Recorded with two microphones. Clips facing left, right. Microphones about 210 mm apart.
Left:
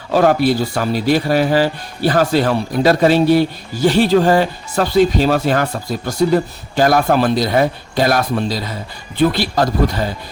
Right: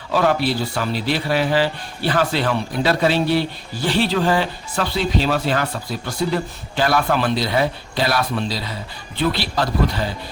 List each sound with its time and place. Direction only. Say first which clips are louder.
0.1 s speech: left 5 dB; 45° left (ahead or behind)